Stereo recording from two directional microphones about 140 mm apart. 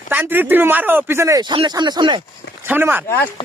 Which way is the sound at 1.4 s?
35° right (ahead or behind).